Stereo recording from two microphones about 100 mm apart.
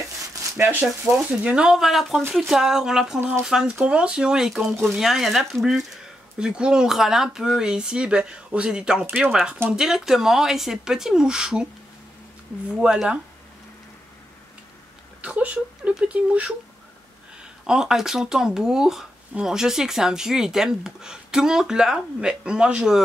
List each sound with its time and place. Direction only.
0.3 s a sound: 30° right (ahead or behind)
0.7 s speech: 20° right (ahead or behind)
1.1 s speech: 10° right (ahead or behind)
9.7 s speech: 5° right (ahead or behind)
12.8 s speech: 10° right (ahead or behind)
15.2 s speech: 15° right (ahead or behind)
17.6 s speech: 5° right (ahead or behind)